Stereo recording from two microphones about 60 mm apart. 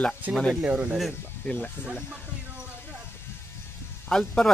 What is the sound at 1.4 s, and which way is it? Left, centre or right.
Speech, centre.